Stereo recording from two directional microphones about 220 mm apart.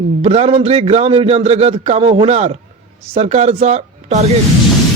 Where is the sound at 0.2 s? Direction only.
25° right (ahead or behind).